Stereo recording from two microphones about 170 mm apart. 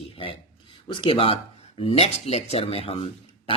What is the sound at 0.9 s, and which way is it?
Speech, 30° left (ahead or behind).